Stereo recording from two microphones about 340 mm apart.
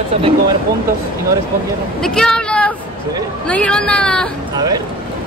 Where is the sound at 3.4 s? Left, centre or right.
Centre.